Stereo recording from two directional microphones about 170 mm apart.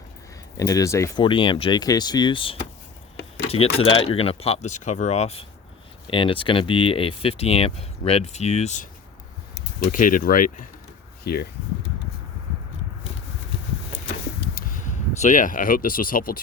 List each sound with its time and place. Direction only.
0.5 s speech: 20° left (ahead or behind)
1.2 s speech: 30° left (ahead or behind)
9.9 s speech: 55° left (ahead or behind)
11.2 s speech: 70° left (ahead or behind)
15.2 s speech: 50° left (ahead or behind)